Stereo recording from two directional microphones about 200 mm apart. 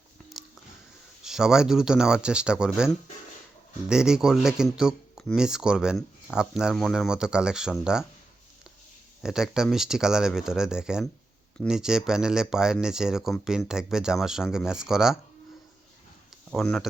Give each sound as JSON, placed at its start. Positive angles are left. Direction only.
{"t": 1.2, "sound": "speech", "side_deg": -5}
{"t": 9.2, "sound": "speech", "side_deg": -5}
{"t": 16.5, "sound": "speech", "side_deg": 0}